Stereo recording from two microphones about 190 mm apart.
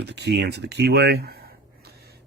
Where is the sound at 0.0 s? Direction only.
60° right (ahead or behind).